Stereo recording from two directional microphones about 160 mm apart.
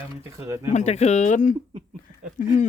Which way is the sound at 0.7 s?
45° left (ahead or behind).